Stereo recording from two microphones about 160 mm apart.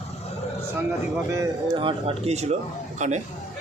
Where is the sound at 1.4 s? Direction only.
25° right (ahead or behind).